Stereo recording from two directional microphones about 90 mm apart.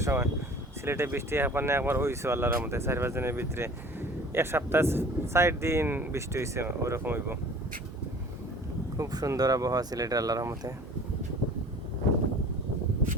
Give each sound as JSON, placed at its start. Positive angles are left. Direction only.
{"t": 0.0, "sound": "speech", "side_deg": -30}
{"t": 9.0, "sound": "speech", "side_deg": -40}